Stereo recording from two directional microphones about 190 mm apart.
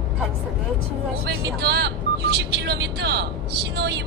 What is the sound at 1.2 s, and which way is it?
Speech, 60° right (ahead or behind).